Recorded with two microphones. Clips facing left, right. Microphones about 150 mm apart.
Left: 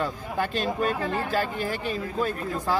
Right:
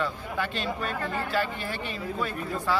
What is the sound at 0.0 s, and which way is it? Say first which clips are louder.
Speech: left 2 dB; 40° left (ahead or behind).